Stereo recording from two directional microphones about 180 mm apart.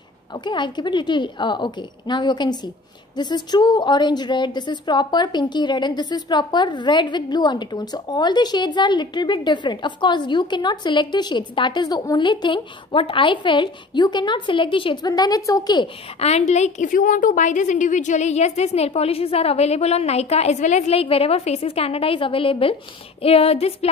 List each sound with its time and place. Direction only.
0.3 s a woman's voice: 25° left (ahead or behind)
16.2 s a woman's voice: 35° left (ahead or behind)